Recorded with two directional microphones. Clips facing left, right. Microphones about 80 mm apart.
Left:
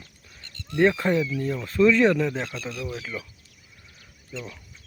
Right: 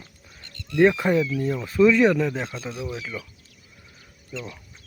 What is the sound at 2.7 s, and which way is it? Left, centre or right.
Speech, centre.